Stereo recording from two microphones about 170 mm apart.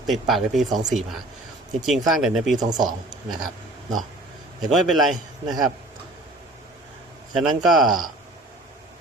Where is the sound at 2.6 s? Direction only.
25° right (ahead or behind).